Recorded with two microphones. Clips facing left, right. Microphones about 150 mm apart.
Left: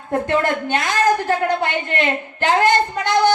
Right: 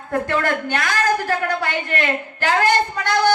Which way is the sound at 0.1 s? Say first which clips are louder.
Left 2 dB; 20° left (ahead or behind).